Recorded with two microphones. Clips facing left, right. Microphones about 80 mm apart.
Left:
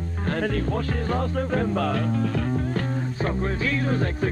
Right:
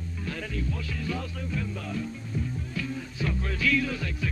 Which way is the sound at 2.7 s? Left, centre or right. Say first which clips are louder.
Left 6 dB; left.